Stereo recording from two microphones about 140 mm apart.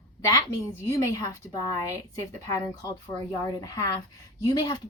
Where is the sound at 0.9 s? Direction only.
25° left (ahead or behind).